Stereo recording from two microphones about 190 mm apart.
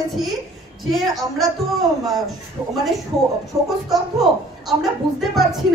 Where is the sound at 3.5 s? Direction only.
15° right (ahead or behind).